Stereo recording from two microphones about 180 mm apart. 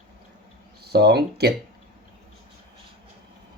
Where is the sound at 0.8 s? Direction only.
65° right (ahead or behind).